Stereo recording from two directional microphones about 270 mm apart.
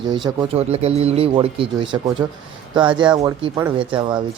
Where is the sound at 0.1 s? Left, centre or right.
Centre.